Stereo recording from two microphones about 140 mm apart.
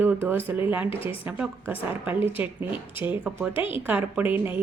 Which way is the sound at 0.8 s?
40° left (ahead or behind).